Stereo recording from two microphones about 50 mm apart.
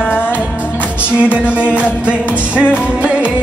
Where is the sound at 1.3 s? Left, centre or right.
Right.